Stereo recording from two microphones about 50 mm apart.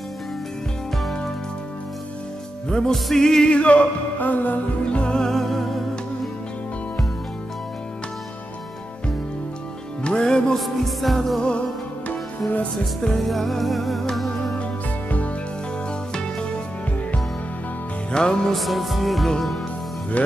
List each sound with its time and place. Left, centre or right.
2.7 s music: centre
3.5 s music: left
4.9 s music: centre
10.0 s music: centre
10.6 s music: centre
13.0 s music: centre
14.6 s music: left
18.1 s music: centre
18.5 s music: centre
20.2 s music: left